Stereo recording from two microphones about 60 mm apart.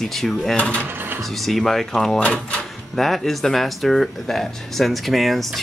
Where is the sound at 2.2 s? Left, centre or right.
Centre.